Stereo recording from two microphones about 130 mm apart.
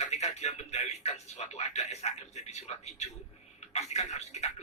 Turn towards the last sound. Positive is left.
turn(degrees=60)  # may be behind; listen again after turning